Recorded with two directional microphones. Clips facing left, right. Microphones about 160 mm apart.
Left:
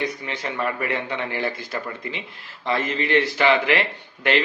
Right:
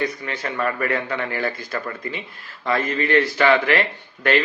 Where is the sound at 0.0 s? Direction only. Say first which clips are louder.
Right 2 dB; 20° left (ahead or behind).